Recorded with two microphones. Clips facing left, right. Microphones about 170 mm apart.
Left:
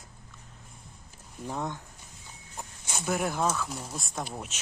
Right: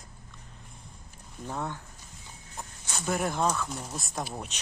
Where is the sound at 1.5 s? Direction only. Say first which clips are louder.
Left 1 dB; 15° left (ahead or behind).